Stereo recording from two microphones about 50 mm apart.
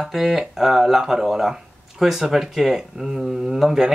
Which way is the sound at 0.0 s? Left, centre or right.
Centre.